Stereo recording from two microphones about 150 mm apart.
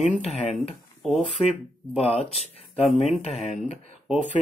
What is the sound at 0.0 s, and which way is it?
Speech, 45° left (ahead or behind).